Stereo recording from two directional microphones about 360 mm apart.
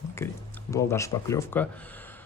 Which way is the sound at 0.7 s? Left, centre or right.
Centre.